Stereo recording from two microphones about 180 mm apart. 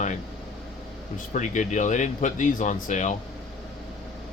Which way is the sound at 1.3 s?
45° left (ahead or behind).